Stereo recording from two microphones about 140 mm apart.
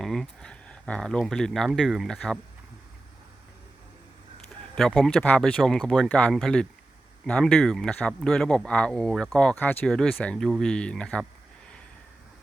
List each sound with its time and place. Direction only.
0.0 s speech: centre (ahead or behind)
4.7 s speech: 5° left (ahead or behind)